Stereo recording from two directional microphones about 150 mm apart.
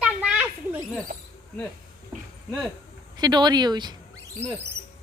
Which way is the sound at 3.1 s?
30° right (ahead or behind).